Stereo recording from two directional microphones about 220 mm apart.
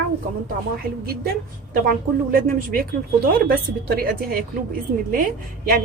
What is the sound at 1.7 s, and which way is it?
A woman's voice, 40° right (ahead or behind).